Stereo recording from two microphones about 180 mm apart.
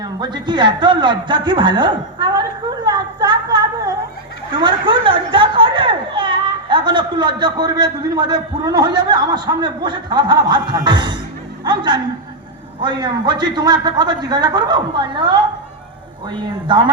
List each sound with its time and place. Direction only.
0.0 s speech: 25° right (ahead or behind)
2.8 s a sound: 25° right (ahead or behind)
4.5 s speech: 25° right (ahead or behind)